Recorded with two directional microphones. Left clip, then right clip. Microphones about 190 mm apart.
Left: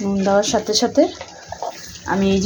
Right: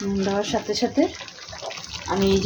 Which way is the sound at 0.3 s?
20° left (ahead or behind).